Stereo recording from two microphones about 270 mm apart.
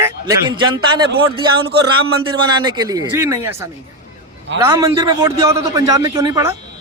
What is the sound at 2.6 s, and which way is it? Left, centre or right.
Speech, centre.